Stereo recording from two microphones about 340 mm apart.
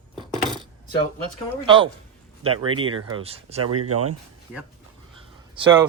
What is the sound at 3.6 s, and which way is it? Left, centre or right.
Speech, right.